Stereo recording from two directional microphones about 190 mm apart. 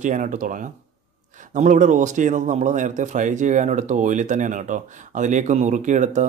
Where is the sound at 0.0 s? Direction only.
40° right (ahead or behind).